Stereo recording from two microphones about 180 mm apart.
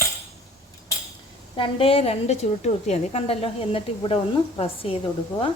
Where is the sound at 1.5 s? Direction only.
30° left (ahead or behind).